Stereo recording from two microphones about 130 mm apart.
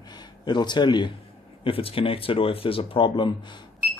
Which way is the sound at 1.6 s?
45° left (ahead or behind).